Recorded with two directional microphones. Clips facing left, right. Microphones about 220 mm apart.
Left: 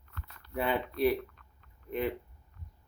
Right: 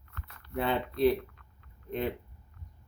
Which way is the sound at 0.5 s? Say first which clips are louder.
Right 1 dB; 10° left (ahead or behind).